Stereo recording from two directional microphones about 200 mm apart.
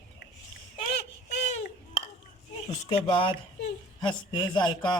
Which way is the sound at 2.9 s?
25° left (ahead or behind).